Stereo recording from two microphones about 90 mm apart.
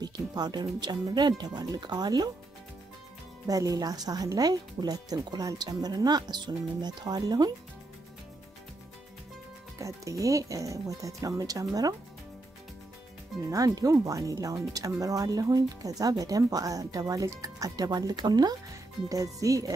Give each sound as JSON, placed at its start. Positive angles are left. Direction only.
{"t": 0.0, "sound": "speech", "side_deg": -50}
{"t": 3.4, "sound": "speech", "side_deg": -40}
{"t": 9.8, "sound": "speech", "side_deg": -35}
{"t": 13.5, "sound": "speech", "side_deg": -40}
{"t": 19.0, "sound": "speech", "side_deg": -40}